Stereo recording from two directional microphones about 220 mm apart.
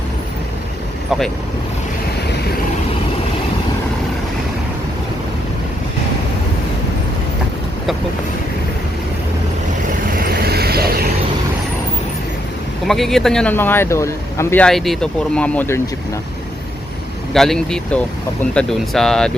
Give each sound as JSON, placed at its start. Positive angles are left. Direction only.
{"t": 10.2, "sound": "vehicle", "side_deg": -45}
{"t": 12.9, "sound": "speech", "side_deg": 0}
{"t": 17.3, "sound": "speech", "side_deg": 0}